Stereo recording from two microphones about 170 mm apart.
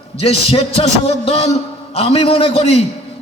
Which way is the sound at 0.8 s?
35° left (ahead or behind).